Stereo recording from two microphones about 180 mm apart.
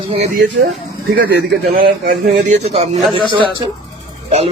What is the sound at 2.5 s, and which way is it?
Speech, 35° right (ahead or behind).